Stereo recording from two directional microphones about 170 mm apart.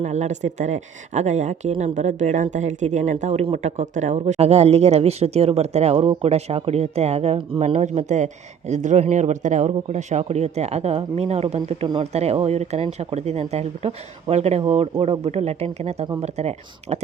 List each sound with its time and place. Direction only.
0.0 s speech: 40° right (ahead or behind)